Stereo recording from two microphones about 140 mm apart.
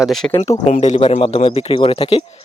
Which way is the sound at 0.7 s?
55° left (ahead or behind).